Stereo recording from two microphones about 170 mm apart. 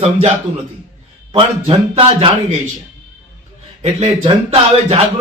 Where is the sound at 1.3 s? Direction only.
30° right (ahead or behind).